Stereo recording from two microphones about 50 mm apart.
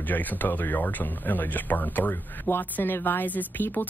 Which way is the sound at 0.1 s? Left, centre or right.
Left.